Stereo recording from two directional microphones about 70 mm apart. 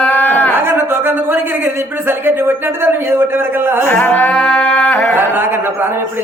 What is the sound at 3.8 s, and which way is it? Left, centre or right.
Music, left.